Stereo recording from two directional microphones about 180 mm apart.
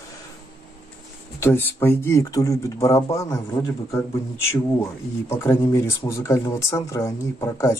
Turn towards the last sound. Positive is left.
turn(degrees=15)  # may be behind; listen again after turning